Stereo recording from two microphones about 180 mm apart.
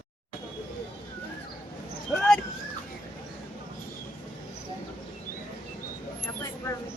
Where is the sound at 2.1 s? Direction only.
5° left (ahead or behind).